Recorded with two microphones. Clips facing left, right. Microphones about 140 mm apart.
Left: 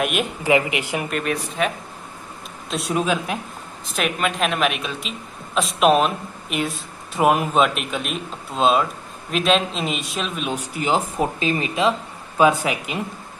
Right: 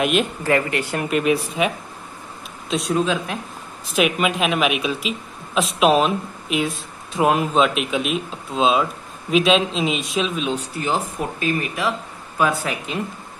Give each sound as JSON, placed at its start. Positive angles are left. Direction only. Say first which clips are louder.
{"t": 0.0, "sound": "speech", "louder": "right 3 dB", "side_deg": 5}
{"t": 0.5, "sound": "speech", "louder": "left 4 dB", "side_deg": 15}
{"t": 1.1, "sound": "speech", "louder": "right 9 dB", "side_deg": -5}
{"t": 2.9, "sound": "speech", "louder": "even", "side_deg": 10}
{"t": 3.9, "sound": "speech", "louder": "right 4 dB", "side_deg": -5}